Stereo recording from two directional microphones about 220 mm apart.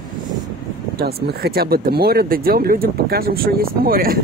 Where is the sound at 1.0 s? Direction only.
45° right (ahead or behind).